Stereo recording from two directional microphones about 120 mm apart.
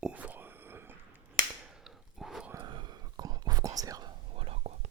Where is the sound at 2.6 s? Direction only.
40° right (ahead or behind).